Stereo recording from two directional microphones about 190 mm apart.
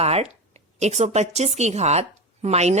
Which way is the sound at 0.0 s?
35° right (ahead or behind).